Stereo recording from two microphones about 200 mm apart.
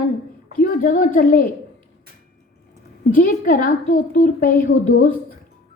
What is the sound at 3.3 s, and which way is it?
A woman's voice, 45° left (ahead or behind).